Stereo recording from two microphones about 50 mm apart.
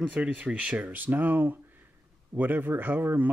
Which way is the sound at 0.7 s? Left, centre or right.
Right.